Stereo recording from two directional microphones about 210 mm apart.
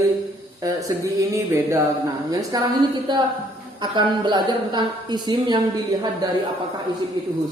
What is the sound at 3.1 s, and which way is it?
A woman's voice, 20° right (ahead or behind).